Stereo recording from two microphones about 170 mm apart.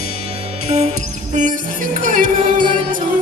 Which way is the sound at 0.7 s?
40° right (ahead or behind).